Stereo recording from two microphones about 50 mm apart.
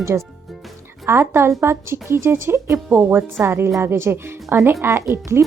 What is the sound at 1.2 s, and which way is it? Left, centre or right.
A woman's voice, right.